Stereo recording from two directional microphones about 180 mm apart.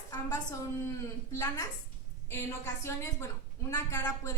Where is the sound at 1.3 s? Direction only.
15° left (ahead or behind).